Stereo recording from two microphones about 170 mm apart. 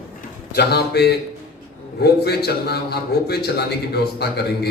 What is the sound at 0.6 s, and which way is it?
A man's voice, 70° left (ahead or behind).